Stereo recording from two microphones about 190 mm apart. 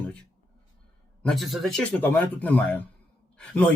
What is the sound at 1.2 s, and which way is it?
A man's voice, centre (ahead or behind).